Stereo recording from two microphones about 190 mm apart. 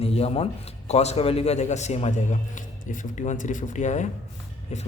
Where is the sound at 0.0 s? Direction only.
30° left (ahead or behind).